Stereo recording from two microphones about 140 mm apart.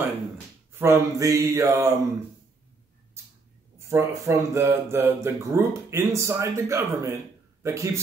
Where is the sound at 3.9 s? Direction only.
20° right (ahead or behind).